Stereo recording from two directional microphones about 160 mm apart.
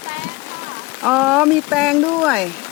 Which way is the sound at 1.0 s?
Centre (ahead or behind).